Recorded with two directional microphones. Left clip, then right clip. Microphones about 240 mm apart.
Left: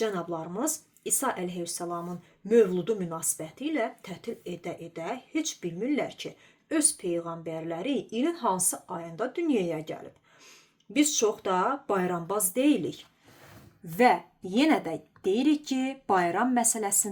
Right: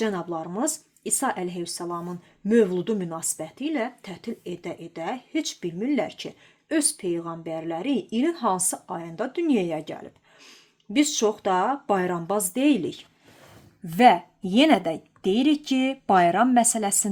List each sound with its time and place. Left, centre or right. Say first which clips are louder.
0.3 s speech: right 4 dB; right